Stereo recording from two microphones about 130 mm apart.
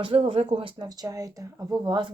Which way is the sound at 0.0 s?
45° right (ahead or behind).